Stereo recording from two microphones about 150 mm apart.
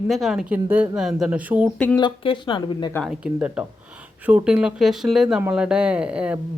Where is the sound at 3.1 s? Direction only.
10° right (ahead or behind).